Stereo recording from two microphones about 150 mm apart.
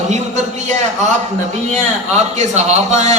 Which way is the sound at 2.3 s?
50° right (ahead or behind).